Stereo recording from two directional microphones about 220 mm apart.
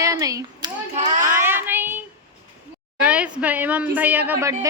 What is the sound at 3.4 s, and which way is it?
Speech, 5° right (ahead or behind).